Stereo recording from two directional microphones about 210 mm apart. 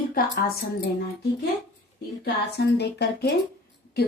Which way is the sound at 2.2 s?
50° left (ahead or behind).